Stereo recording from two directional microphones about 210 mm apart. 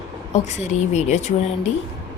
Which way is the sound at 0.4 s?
35° left (ahead or behind).